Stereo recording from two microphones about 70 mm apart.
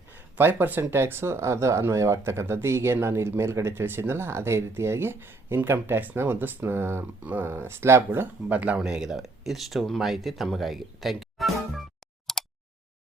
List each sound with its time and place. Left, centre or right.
0.2 s speech: right
7.2 s speech: right
8.5 s speech: centre
8.8 s speech: centre
12.3 s a sound: centre